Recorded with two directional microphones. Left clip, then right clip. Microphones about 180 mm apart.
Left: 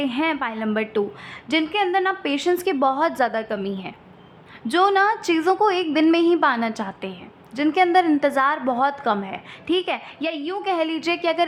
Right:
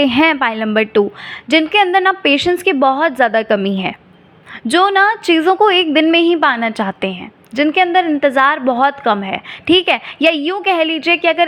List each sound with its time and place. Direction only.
0.0 s a woman's voice: 30° right (ahead or behind)
3.5 s a woman's voice: 35° right (ahead or behind)
4.6 s a woman's voice: 15° right (ahead or behind)
7.7 s a woman's voice: 10° right (ahead or behind); by 10.6 s 30° right (ahead or behind)
10.6 s a woman's voice: 20° right (ahead or behind)